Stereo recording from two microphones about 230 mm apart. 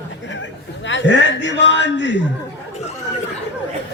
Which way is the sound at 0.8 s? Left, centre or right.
Left.